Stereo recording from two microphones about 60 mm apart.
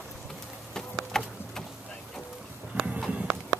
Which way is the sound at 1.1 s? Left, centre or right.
Centre.